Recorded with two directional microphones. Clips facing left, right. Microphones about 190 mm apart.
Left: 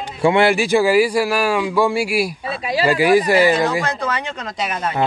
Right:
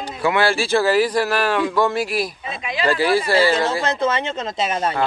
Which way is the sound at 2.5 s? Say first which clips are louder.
Left 5 dB; 35° left (ahead or behind).